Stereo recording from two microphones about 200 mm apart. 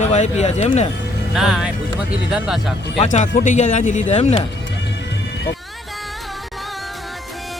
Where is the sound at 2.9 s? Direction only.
35° left (ahead or behind).